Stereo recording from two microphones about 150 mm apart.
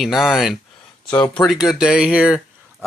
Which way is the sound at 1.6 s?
5° right (ahead or behind).